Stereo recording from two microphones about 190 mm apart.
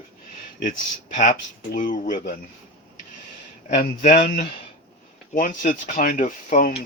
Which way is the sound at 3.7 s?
45° left (ahead or behind).